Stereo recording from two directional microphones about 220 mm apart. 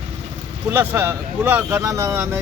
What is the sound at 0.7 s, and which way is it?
Speech, 10° right (ahead or behind).